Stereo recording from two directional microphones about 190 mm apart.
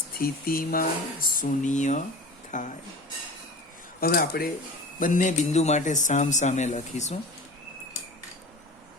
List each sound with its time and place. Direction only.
0.2 s a man's voice: 50° left (ahead or behind)
4.0 s a man's voice: 50° left (ahead or behind)